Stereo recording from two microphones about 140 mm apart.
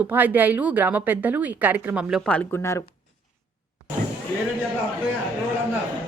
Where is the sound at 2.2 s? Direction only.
10° left (ahead or behind).